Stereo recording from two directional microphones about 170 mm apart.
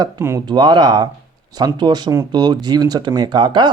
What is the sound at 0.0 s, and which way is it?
Speech, 15° right (ahead or behind).